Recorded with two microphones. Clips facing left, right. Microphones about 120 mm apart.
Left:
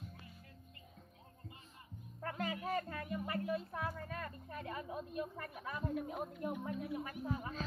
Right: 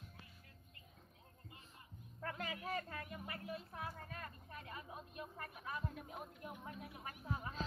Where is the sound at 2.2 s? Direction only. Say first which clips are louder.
Left 5 dB; 30° left (ahead or behind).